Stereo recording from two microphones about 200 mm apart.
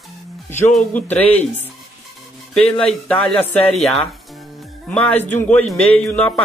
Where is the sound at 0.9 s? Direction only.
10° left (ahead or behind).